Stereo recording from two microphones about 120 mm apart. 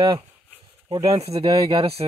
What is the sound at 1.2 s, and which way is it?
Speech, 60° right (ahead or behind).